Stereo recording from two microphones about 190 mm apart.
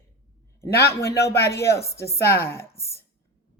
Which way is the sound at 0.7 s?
55° left (ahead or behind).